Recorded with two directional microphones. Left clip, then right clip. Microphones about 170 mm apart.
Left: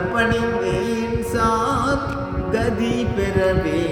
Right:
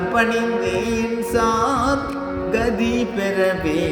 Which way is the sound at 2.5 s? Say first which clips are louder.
Right 1 dB; 25° right (ahead or behind).